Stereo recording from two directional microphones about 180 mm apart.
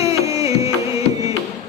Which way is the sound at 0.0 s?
15° right (ahead or behind).